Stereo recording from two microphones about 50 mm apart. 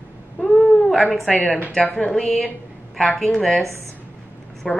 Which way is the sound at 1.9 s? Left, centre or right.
Centre.